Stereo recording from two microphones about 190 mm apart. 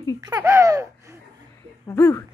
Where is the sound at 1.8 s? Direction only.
15° left (ahead or behind).